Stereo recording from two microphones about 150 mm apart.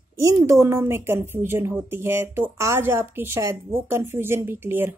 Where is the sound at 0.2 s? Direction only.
20° right (ahead or behind).